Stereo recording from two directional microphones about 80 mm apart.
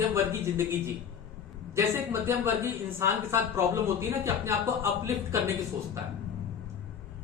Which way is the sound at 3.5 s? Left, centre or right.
Right.